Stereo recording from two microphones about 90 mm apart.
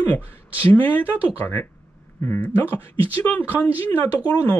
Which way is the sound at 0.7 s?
20° left (ahead or behind).